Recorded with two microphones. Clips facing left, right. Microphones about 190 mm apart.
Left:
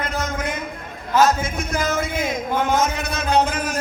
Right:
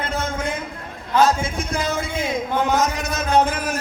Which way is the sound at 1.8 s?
30° right (ahead or behind).